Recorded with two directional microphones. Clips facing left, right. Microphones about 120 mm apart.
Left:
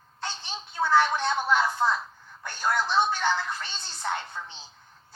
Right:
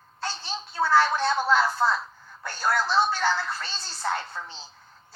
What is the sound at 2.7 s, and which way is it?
Speech, 20° left (ahead or behind).